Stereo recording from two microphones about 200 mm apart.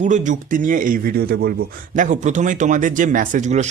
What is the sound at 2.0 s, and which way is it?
Speech, 35° right (ahead or behind).